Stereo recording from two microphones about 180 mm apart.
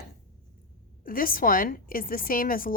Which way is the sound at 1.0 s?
50° left (ahead or behind).